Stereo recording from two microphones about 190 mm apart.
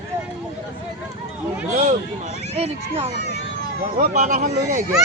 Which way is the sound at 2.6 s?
30° right (ahead or behind).